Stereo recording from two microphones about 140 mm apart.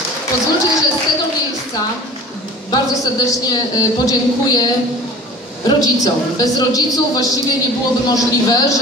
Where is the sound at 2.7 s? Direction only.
25° left (ahead or behind).